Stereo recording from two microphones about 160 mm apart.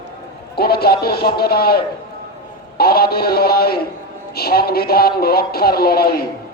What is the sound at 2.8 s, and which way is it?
A man's voice, 75° left (ahead or behind).